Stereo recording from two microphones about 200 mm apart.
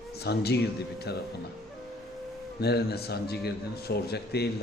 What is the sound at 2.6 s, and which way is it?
Speech, 55° left (ahead or behind).